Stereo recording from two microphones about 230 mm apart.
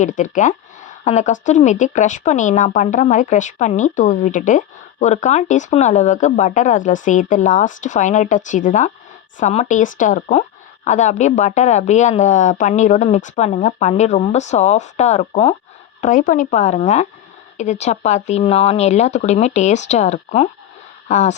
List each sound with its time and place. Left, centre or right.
0.0 s speech: left